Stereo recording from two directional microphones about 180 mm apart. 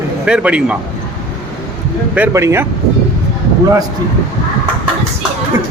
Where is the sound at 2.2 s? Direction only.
15° right (ahead or behind).